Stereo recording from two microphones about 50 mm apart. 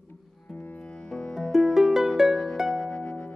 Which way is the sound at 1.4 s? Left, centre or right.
Centre.